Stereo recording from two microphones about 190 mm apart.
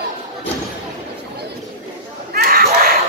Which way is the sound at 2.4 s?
50° right (ahead or behind).